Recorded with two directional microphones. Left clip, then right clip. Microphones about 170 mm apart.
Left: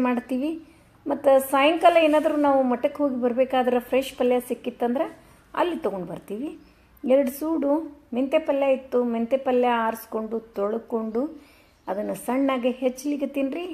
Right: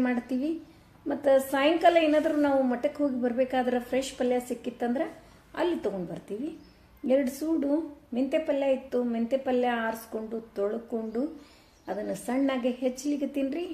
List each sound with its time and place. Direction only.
0.0 s a woman's voice: 10° left (ahead or behind)